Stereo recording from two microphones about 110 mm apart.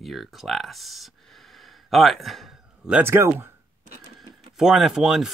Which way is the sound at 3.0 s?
20° right (ahead or behind).